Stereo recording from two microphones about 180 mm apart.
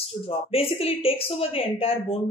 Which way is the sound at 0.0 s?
30° left (ahead or behind).